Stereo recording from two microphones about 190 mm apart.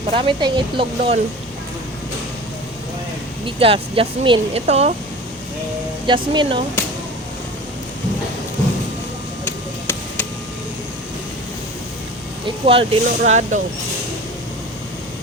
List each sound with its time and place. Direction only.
0.1 s speech: 30° right (ahead or behind)
3.4 s speech: 30° right (ahead or behind)
6.1 s speech: 25° right (ahead or behind)
9.4 s a sound: 10° left (ahead or behind)
12.5 s speech: 30° right (ahead or behind)